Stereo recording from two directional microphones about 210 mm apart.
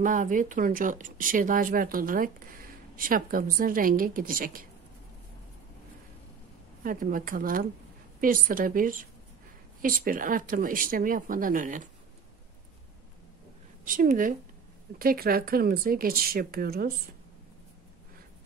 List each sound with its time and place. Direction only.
0.0 s speech: 40° right (ahead or behind)
6.8 s speech: 40° right (ahead or behind)
13.8 s speech: 40° right (ahead or behind)